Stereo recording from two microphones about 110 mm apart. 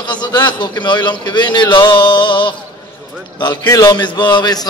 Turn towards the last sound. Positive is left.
turn(degrees=40)  # may be behind; listen again after turning